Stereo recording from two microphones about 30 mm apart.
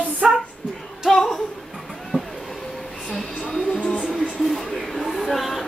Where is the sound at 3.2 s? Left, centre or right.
Centre.